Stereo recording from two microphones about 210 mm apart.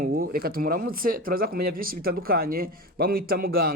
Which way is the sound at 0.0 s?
45° right (ahead or behind).